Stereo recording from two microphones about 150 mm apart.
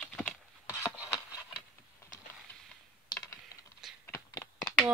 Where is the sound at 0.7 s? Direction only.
15° left (ahead or behind).